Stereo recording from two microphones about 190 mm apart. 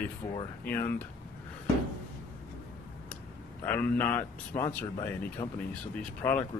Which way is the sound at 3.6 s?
10° left (ahead or behind).